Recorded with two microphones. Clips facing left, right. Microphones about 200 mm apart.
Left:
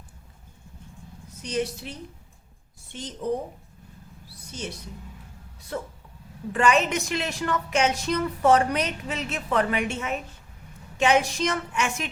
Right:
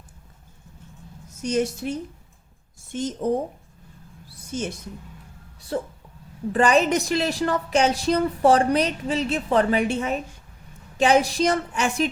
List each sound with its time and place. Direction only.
1.4 s a woman's voice: 45° right (ahead or behind)
4.5 s a woman's voice: 50° right (ahead or behind)
5.7 s a woman's voice: 35° right (ahead or behind)